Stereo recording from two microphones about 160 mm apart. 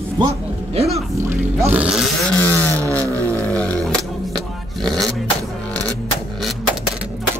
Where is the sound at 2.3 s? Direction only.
10° left (ahead or behind).